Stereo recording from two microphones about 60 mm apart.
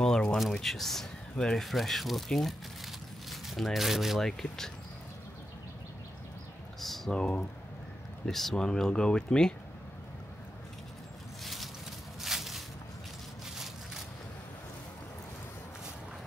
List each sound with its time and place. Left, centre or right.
0.0 s a sound: centre
0.4 s speech: centre
1.7 s speech: centre
4.2 s speech: centre
7.1 s speech: centre
11.4 s boat: centre
12.2 s a sound: centre